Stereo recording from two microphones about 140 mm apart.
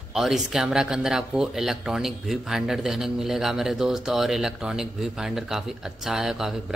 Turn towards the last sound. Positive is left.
turn(degrees=-5)  # may be behind; listen again after turning